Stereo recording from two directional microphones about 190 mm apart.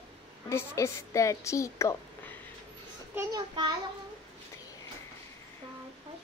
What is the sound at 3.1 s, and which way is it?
Speech, 25° right (ahead or behind).